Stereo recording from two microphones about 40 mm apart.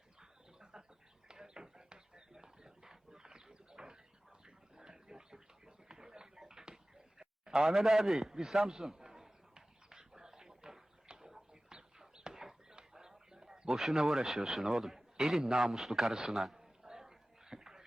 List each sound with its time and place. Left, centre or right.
0.2 s bird: centre
1.3 s a sound: centre
7.8 s a man's voice: centre
9.0 s a sound: centre
14.6 s a man's voice: centre
16.6 s dog: centre